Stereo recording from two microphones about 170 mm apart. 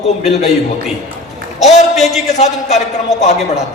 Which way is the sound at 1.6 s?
40° left (ahead or behind).